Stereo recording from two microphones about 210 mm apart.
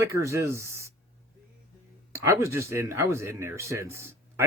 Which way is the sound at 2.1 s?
15° right (ahead or behind).